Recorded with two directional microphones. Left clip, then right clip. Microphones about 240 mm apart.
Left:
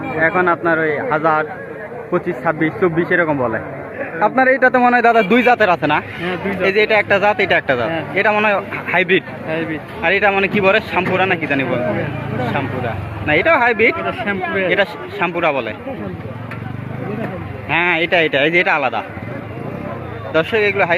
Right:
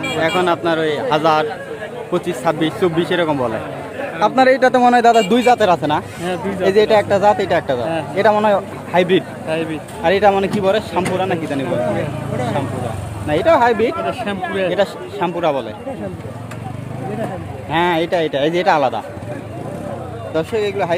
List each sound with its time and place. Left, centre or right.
0.2 s speech: centre
13.2 s speech: centre
17.7 s speech: centre
20.3 s speech: centre